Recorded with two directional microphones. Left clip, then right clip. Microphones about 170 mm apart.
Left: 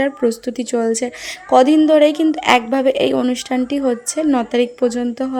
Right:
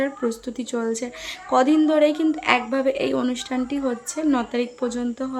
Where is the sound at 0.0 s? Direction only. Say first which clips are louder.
Left 7 dB; 30° left (ahead or behind).